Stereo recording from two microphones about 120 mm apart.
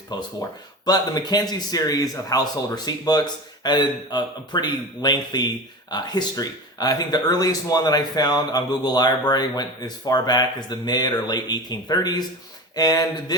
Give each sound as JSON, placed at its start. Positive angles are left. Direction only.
{"t": 0.9, "sound": "speech", "side_deg": 35}